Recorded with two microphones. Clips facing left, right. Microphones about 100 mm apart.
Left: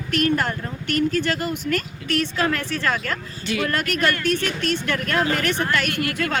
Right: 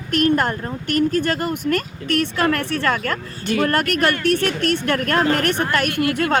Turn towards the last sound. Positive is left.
turn(degrees=-25)  # may be behind; listen again after turning